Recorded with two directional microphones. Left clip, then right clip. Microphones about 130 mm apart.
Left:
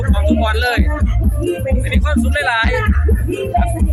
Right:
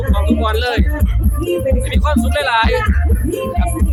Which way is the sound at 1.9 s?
15° right (ahead or behind).